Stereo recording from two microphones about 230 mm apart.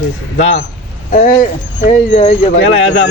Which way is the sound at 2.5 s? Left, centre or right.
Left.